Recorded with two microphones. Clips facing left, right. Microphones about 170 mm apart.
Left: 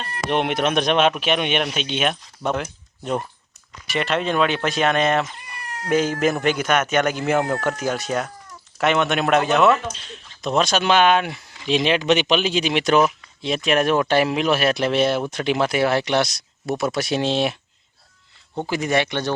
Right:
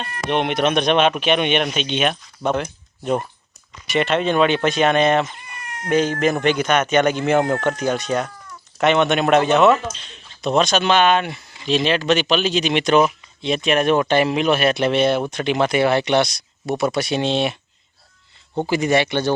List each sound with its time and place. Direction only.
0.3 s speech: 5° left (ahead or behind)
5.5 s cat: 35° left (ahead or behind)
5.9 s speech: 5° left (ahead or behind)
18.6 s speech: centre (ahead or behind)